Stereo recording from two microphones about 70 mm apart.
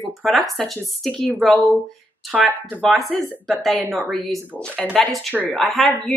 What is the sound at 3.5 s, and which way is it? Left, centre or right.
Speech, centre.